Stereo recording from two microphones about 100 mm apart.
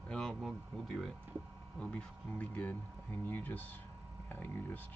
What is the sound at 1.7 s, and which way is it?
Speech, 10° left (ahead or behind).